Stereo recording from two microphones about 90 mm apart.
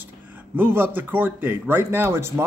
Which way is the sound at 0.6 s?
25° right (ahead or behind).